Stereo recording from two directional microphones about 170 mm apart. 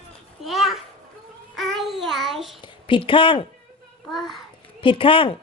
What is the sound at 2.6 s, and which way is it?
Speech, 30° left (ahead or behind).